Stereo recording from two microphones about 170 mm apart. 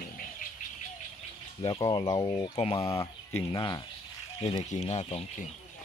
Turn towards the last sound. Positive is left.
turn(degrees=35)  # may be behind; listen again after turning